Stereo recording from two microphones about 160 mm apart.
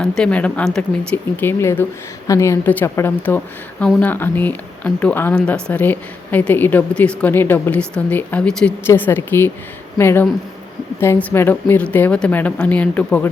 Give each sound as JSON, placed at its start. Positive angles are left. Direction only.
{"t": 0.0, "sound": "speech", "side_deg": 5}